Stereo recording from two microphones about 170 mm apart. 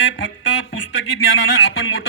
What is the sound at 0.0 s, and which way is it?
Speech, 90° left.